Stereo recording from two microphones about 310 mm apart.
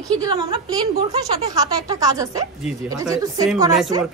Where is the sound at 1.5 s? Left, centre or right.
Centre.